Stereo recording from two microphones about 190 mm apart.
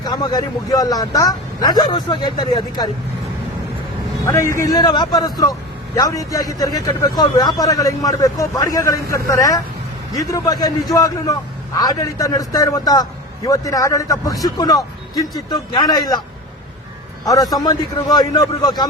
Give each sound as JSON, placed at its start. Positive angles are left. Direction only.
{"t": 0.0, "sound": "a man's voice", "side_deg": 20}
{"t": 4.3, "sound": "a man's voice", "side_deg": 15}
{"t": 17.2, "sound": "a man's voice", "side_deg": 20}